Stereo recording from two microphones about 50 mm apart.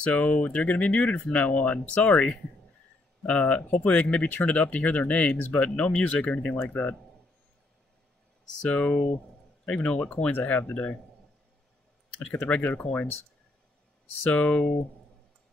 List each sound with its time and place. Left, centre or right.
0.0 s speech: left
3.3 s speech: left
8.6 s speech: left
12.4 s speech: left
14.2 s speech: left